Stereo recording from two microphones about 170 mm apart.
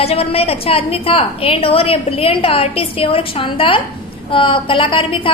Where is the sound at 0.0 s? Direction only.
35° left (ahead or behind).